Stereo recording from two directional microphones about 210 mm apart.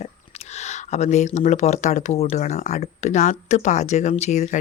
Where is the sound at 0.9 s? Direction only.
35° left (ahead or behind).